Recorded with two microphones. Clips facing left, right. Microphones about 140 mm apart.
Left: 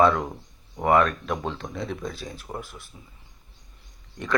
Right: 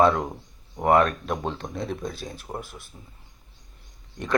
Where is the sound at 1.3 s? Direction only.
5° right (ahead or behind).